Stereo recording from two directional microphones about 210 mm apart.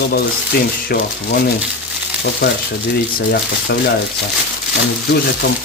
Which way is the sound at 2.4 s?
55° left (ahead or behind).